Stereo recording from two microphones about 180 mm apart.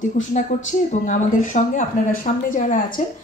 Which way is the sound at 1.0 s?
45° left (ahead or behind).